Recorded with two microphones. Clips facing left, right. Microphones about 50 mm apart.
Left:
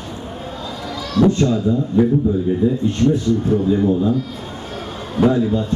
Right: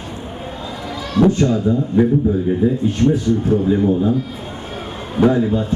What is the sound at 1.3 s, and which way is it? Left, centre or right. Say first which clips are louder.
Speech: right 1 dB; right.